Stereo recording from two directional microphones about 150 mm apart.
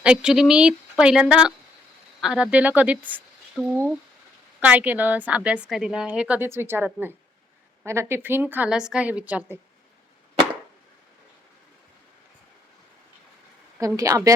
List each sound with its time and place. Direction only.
0.0 s a woman's voice: 5° right (ahead or behind)
3.1 s a sound: 10° right (ahead or behind)
4.6 s a woman's voice: 10° right (ahead or behind)
13.7 s a woman's voice: 20° right (ahead or behind)